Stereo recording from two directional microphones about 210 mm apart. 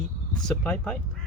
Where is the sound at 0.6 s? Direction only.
5° left (ahead or behind).